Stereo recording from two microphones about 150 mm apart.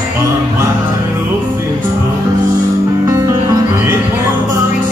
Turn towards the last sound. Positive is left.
turn(degrees=-20)  # may be behind; listen again after turning